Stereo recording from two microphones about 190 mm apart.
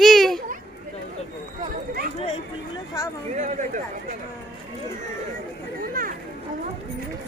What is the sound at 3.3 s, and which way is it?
Speech, 40° right (ahead or behind).